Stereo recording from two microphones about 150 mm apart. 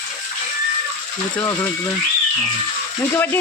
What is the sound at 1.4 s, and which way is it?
Speech, 20° left (ahead or behind).